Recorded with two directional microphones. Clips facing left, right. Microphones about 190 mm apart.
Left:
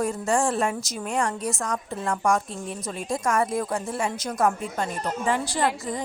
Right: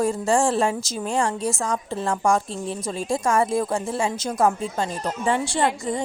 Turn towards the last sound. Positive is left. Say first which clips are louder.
# right 3 dB
turn(degrees=-25)  # may be behind; listen again after turning